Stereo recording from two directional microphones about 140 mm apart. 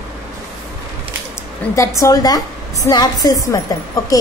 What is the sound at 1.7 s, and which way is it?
A woman's voice, 20° left (ahead or behind).